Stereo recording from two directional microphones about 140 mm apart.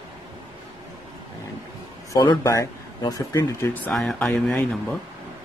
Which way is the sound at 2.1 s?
25° left (ahead or behind).